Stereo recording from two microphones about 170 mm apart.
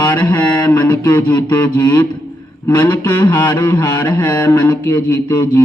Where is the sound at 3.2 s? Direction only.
25° left (ahead or behind).